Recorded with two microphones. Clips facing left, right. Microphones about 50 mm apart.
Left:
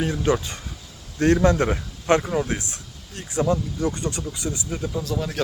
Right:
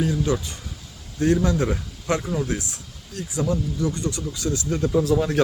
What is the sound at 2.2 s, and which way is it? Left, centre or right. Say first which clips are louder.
Speech: left 1 dB; left.